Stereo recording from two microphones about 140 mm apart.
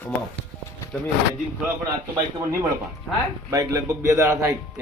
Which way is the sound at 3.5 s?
25° right (ahead or behind).